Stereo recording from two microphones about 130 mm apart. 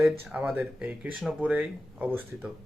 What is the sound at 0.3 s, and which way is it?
Speech, 10° right (ahead or behind).